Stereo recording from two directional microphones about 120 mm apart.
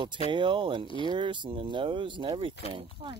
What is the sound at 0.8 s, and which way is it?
Speech, 45° left (ahead or behind).